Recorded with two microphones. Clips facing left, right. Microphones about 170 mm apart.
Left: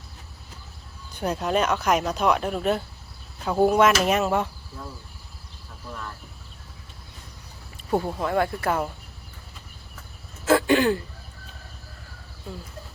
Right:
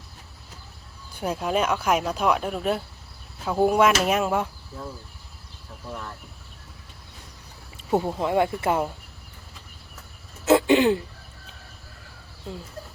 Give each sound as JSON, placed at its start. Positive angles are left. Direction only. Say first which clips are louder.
{"t": 1.1, "sound": "speech", "louder": "left 1 dB", "side_deg": -5}
{"t": 7.9, "sound": "speech", "louder": "right 1 dB", "side_deg": -15}
{"t": 10.4, "sound": "throat clearing", "louder": "right 2 dB", "side_deg": -20}